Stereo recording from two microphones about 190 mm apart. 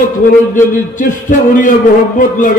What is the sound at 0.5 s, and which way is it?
A man's voice, 45° left (ahead or behind).